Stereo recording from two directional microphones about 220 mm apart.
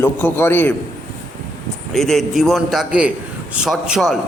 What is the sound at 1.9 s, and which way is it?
A man's voice, centre (ahead or behind).